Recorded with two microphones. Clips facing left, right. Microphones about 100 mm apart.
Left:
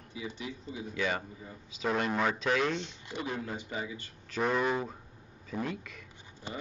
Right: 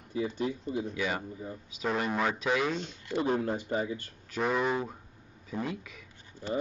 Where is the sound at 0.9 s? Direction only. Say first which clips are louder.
Even; 5° right (ahead or behind).